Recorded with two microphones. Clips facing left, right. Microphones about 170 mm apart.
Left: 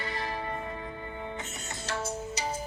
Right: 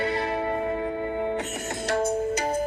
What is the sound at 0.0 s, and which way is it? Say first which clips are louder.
Music: right 9 dB; 65° right (ahead or behind).